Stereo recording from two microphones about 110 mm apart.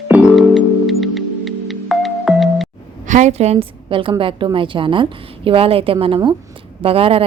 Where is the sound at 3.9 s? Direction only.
50° right (ahead or behind).